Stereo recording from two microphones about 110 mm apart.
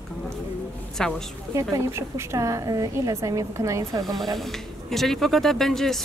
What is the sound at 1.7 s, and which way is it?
A woman's voice, 30° right (ahead or behind).